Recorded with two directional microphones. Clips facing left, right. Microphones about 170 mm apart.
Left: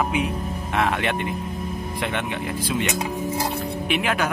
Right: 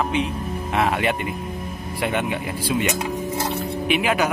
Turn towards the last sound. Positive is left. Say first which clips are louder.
# right 3 dB
turn(degrees=-5)  # may be behind; listen again after turning